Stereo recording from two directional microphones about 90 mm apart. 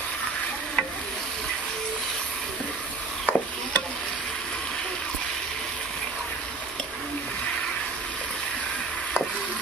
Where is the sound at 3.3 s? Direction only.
15° left (ahead or behind).